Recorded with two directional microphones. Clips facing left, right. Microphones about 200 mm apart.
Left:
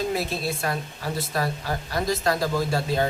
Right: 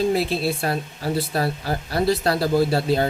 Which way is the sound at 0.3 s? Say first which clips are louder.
Right 4 dB; 30° right (ahead or behind).